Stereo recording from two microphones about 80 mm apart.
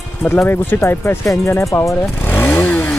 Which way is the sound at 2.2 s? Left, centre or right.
Left.